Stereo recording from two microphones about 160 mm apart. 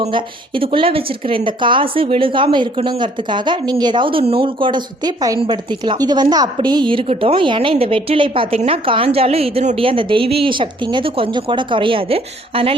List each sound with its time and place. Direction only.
0.0 s a woman's voice: 35° right (ahead or behind)